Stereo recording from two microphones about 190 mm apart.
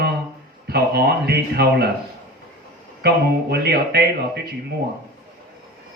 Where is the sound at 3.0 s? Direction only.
60° right (ahead or behind).